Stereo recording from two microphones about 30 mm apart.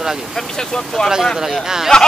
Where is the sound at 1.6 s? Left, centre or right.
Centre.